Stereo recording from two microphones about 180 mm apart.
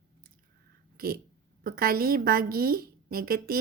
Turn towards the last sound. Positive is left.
turn(degrees=-55)  # may be behind; listen again after turning